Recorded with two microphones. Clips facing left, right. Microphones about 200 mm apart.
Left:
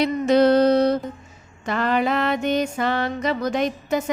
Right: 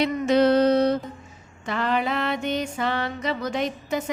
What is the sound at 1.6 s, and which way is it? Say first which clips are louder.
Music: left 3 dB; 45° left (ahead or behind).